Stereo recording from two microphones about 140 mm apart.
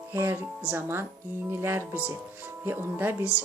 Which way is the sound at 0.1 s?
15° right (ahead or behind).